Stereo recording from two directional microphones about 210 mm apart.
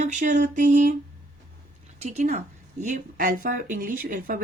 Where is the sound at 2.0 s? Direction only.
35° right (ahead or behind).